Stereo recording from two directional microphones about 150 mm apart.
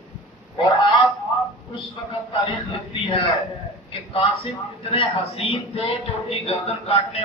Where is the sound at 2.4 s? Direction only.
35° left (ahead or behind).